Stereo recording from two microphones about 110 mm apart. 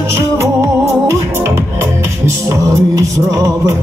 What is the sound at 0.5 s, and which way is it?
Music, 25° right (ahead or behind).